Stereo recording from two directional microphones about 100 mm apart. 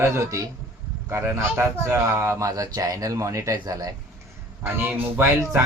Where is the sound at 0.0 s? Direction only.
35° right (ahead or behind).